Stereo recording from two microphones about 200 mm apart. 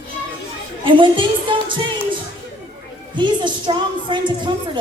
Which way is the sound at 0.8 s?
25° right (ahead or behind).